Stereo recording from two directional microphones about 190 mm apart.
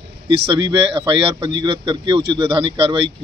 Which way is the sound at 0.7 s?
25° right (ahead or behind).